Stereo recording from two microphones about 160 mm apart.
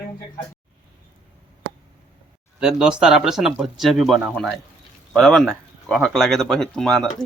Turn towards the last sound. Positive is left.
turn(degrees=5)  # may be behind; listen again after turning